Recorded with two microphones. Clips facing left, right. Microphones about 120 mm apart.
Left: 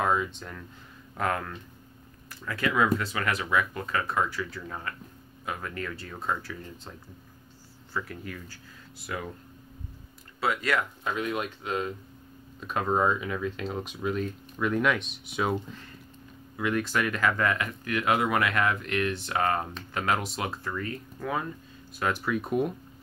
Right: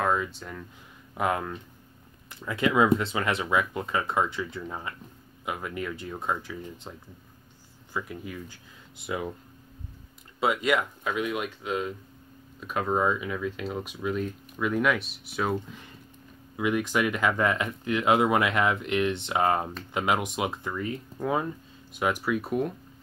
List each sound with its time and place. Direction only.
0.0 s speech: centre (ahead or behind)
1.1 s speech: 15° right (ahead or behind)
7.9 s speech: 15° right (ahead or behind)
10.4 s speech: 20° right (ahead or behind)
11.1 s speech: 5° right (ahead or behind)
16.5 s speech: 15° right (ahead or behind)